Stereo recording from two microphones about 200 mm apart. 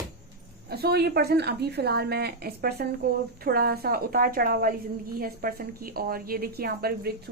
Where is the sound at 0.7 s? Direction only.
55° right (ahead or behind).